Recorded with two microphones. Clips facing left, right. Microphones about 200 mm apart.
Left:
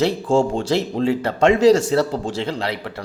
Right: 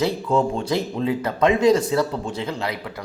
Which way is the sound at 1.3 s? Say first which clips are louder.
Left 3 dB; 80° left.